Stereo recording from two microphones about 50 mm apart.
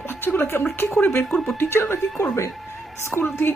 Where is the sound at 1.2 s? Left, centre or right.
Centre.